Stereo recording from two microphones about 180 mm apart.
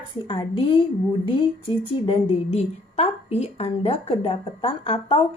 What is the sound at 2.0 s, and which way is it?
A woman's voice, 30° left (ahead or behind).